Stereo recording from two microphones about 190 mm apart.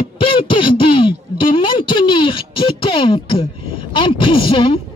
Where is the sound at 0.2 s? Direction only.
25° left (ahead or behind).